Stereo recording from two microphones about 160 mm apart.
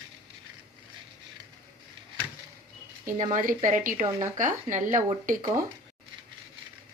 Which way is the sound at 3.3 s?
55° right (ahead or behind).